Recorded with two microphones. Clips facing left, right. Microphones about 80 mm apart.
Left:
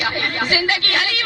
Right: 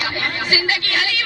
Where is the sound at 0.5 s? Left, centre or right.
Left.